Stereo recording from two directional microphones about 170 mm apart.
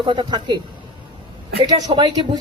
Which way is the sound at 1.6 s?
25° right (ahead or behind).